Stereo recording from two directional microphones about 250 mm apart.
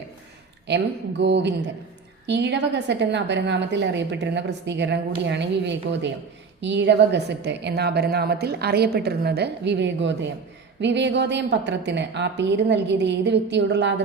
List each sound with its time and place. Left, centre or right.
1.2 s a woman's voice: right